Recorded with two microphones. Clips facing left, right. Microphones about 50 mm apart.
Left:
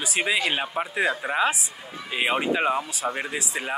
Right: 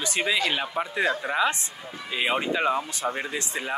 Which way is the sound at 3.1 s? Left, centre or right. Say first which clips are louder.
Left 1 dB; left.